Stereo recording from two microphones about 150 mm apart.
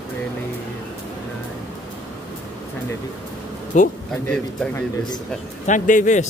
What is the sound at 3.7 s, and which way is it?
Speech, 55° left (ahead or behind).